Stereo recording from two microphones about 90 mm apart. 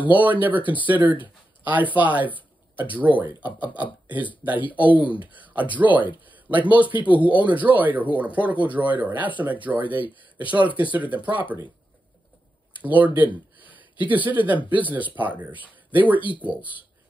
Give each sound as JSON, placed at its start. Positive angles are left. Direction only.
{"t": 0.0, "sound": "speech", "side_deg": -15}
{"t": 6.3, "sound": "a sound", "side_deg": -20}
{"t": 7.3, "sound": "speech", "side_deg": -15}
{"t": 12.8, "sound": "speech", "side_deg": -20}
{"t": 16.2, "sound": "speech", "side_deg": 65}
{"t": 16.4, "sound": "speech", "side_deg": -15}